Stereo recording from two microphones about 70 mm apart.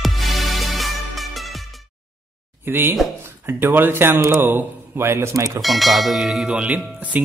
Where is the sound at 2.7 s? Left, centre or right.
Right.